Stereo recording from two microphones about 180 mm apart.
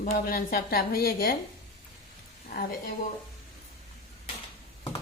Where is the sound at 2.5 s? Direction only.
55° left (ahead or behind).